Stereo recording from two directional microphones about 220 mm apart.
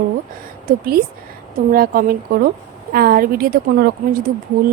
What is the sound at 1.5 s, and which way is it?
A woman's voice, 40° right (ahead or behind).